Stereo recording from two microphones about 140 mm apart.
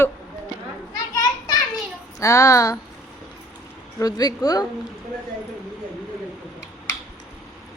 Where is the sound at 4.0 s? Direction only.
25° left (ahead or behind).